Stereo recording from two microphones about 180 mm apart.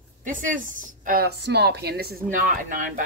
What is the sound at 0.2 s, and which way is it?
Speech, 45° right (ahead or behind).